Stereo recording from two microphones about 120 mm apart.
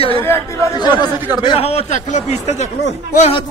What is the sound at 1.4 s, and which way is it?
Speech, 50° left (ahead or behind).